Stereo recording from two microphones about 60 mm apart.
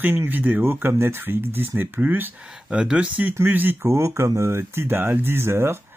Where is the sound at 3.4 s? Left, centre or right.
Right.